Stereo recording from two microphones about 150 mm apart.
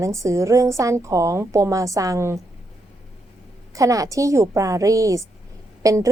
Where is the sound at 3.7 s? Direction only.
20° right (ahead or behind).